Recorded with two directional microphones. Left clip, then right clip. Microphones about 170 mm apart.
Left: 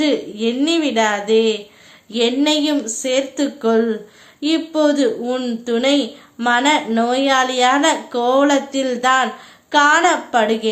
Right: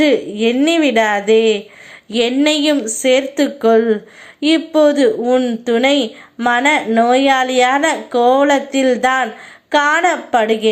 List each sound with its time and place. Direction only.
0.0 s a woman's voice: 30° right (ahead or behind)